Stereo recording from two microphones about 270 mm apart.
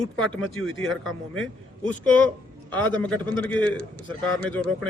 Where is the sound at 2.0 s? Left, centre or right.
Centre.